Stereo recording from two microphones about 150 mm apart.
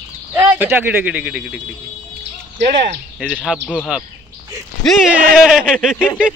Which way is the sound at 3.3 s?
5° left (ahead or behind).